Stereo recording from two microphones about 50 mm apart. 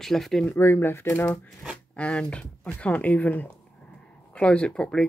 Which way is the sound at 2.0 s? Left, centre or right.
Left.